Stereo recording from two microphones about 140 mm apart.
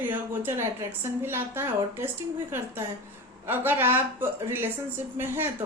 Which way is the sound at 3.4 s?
15° right (ahead or behind).